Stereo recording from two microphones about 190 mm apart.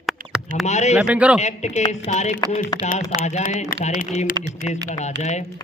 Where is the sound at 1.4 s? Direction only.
35° left (ahead or behind).